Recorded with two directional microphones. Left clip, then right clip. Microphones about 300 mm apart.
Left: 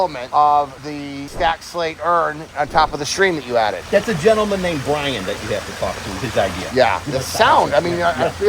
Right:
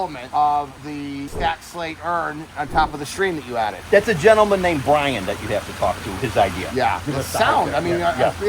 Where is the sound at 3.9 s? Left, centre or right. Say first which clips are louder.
Right 3 dB; centre.